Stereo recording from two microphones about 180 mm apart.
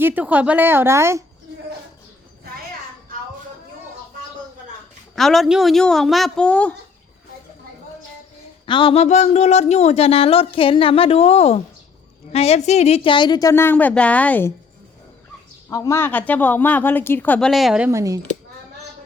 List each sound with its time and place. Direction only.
0.0 s a woman's voice: 10° right (ahead or behind)
5.1 s speech: centre (ahead or behind)
8.6 s a woman's voice: 25° left (ahead or behind); by 14.5 s 10° left (ahead or behind)
15.7 s a woman's voice: 15° left (ahead or behind); by 17.9 s 5° right (ahead or behind)
17.9 s speech: 20° right (ahead or behind)